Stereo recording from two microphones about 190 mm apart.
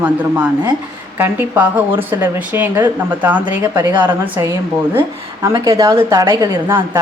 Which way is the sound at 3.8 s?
20° right (ahead or behind).